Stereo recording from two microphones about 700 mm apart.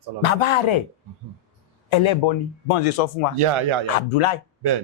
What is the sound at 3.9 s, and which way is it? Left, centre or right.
Speech, left.